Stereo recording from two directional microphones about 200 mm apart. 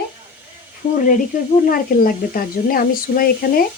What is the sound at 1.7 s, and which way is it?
Speech, 45° left (ahead or behind).